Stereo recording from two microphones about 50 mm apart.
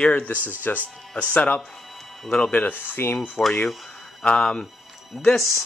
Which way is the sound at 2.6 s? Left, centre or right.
Left.